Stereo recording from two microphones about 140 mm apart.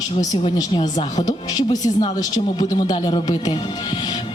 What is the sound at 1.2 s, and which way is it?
A man's voice, 25° left (ahead or behind).